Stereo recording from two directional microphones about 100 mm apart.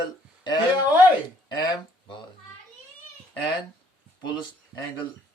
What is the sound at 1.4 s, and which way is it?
Speech, 45° left (ahead or behind).